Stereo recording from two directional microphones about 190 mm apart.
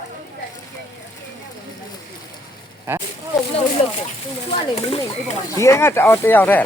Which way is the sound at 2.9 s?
10° right (ahead or behind).